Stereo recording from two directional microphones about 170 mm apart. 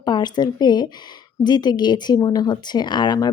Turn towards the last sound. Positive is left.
turn(degrees=25)  # may be behind; listen again after turning